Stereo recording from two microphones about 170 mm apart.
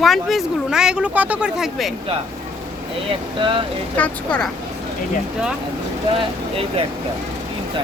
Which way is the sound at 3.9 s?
5° left (ahead or behind).